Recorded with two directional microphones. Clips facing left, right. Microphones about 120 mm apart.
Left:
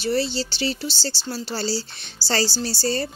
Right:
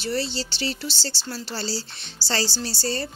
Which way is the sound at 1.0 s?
40° left (ahead or behind).